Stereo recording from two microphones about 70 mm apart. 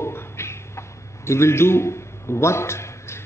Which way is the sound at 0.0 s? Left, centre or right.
Left.